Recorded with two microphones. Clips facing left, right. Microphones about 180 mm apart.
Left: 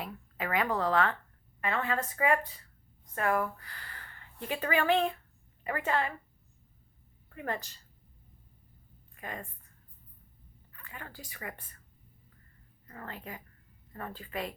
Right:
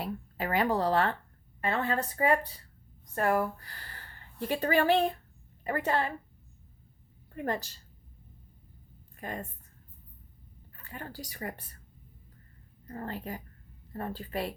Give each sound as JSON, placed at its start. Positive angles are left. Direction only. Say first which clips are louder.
{"t": 0.0, "sound": "a woman's voice", "louder": "right 3 dB", "side_deg": -35}
{"t": 7.3, "sound": "speech", "louder": "right 4 dB", "side_deg": -35}
{"t": 9.1, "sound": "a woman's voice", "louder": "right 3 dB", "side_deg": -35}
{"t": 10.8, "sound": "speech", "louder": "right 5 dB", "side_deg": -35}
{"t": 12.9, "sound": "speech", "louder": "right 6 dB", "side_deg": -35}